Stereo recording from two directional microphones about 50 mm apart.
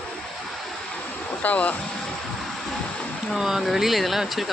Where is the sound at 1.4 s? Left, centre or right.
Left.